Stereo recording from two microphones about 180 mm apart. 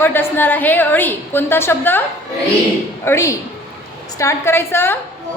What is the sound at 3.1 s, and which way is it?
A woman's voice, 15° left (ahead or behind).